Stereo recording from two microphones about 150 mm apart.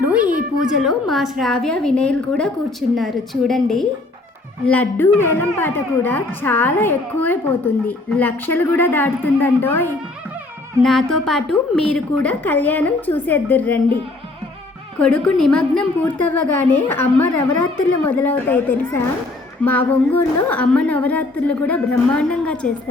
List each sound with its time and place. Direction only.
0.0 s a sound: 10° right (ahead or behind)
0.6 s a woman's voice: 5° right (ahead or behind); by 9.9 s 15° left (ahead or behind)
10.8 s speech: centre (ahead or behind)
14.9 s speech: 5° left (ahead or behind)